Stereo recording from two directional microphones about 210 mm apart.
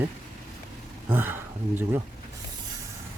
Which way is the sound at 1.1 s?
10° right (ahead or behind).